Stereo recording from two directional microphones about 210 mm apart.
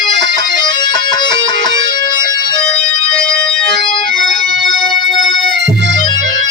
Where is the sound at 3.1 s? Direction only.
5° left (ahead or behind).